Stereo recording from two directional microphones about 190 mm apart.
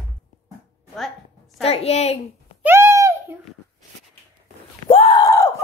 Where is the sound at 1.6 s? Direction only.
30° left (ahead or behind).